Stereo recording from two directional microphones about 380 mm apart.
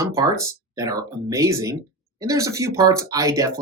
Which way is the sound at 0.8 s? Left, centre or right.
Centre.